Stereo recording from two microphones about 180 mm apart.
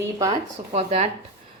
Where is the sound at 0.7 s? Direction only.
35° right (ahead or behind).